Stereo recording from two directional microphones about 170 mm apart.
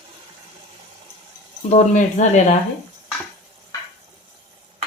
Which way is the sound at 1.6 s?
45° left (ahead or behind).